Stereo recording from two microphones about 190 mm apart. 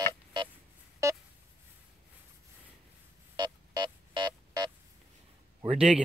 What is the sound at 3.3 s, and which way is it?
Music, 20° right (ahead or behind).